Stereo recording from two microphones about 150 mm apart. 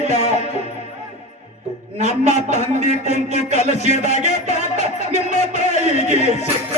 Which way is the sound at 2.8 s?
45° left (ahead or behind).